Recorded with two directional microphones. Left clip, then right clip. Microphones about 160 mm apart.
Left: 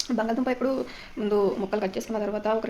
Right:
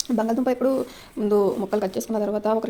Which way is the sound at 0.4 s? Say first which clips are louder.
Right 4 dB; 45° right (ahead or behind).